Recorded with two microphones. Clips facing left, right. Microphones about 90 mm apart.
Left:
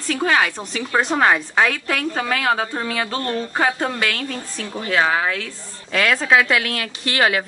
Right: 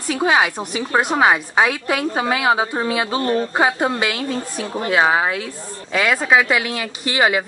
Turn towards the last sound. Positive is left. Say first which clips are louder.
# right 1 dB
turn(degrees=-10)  # may be behind; listen again after turning